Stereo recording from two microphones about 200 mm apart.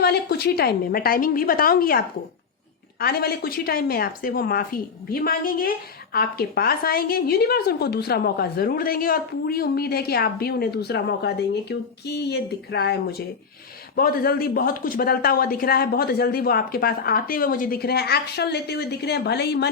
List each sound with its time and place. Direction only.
0.0 s a woman's voice: 50° left (ahead or behind)